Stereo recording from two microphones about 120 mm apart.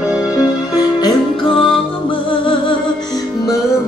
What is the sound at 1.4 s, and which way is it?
Music, 50° left (ahead or behind).